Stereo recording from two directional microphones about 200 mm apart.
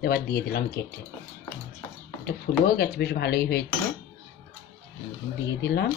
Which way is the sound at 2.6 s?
55° left (ahead or behind).